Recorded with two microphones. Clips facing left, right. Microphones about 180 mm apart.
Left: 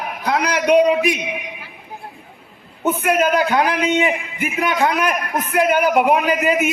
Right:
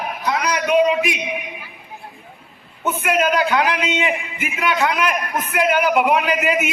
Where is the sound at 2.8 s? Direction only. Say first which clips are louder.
Left 2 dB; 40° left (ahead or behind).